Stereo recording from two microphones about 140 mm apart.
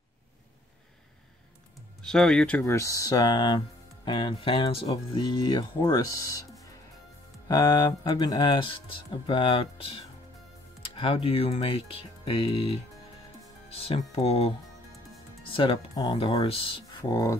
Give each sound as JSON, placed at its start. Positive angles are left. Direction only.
{"t": 2.0, "sound": "speech", "side_deg": 5}
{"t": 7.4, "sound": "speech", "side_deg": 30}
{"t": 15.5, "sound": "speech", "side_deg": 40}
{"t": 15.9, "sound": "speech", "side_deg": 25}
{"t": 16.2, "sound": "speech", "side_deg": 40}